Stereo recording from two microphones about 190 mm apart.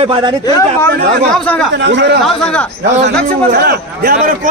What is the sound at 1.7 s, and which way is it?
Speech, 65° right (ahead or behind).